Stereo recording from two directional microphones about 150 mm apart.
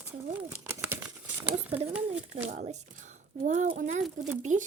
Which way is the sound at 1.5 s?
45° right (ahead or behind).